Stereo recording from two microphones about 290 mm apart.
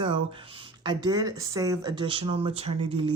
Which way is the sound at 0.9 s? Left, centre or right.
Centre.